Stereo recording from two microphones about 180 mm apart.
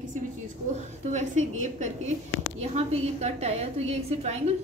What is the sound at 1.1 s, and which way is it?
A woman's voice, 40° right (ahead or behind).